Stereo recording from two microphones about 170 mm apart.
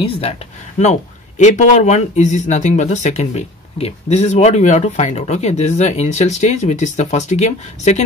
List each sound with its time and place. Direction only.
0.0 s speech: 35° left (ahead or behind)
1.4 s speech: 45° left (ahead or behind)